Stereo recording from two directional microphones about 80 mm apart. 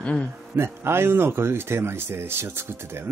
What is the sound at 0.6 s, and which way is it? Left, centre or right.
Speech, right.